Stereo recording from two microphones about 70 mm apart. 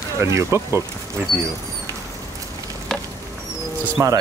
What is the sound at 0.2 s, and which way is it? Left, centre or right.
Speech, right.